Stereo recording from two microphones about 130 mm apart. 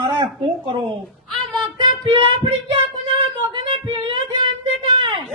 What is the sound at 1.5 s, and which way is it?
A man's voice, 35° right (ahead or behind).